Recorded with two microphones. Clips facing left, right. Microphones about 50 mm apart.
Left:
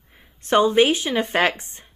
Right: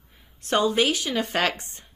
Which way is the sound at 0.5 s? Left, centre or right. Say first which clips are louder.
Left 5 dB; left.